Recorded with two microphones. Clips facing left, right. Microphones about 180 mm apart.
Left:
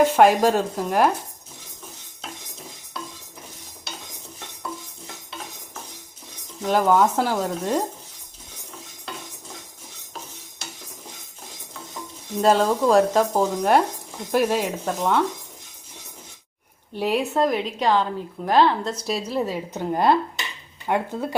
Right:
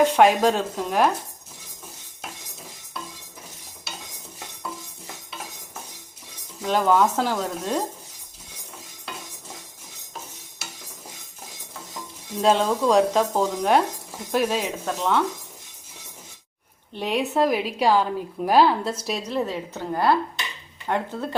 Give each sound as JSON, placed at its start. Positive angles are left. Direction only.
{"t": 0.0, "sound": "speech", "side_deg": 5}
{"t": 6.7, "sound": "speech", "side_deg": 10}
{"t": 12.4, "sound": "speech", "side_deg": 5}
{"t": 16.9, "sound": "a woman's voice", "side_deg": 5}
{"t": 19.0, "sound": "a woman's voice", "side_deg": 5}
{"t": 19.7, "sound": "a woman's voice", "side_deg": 20}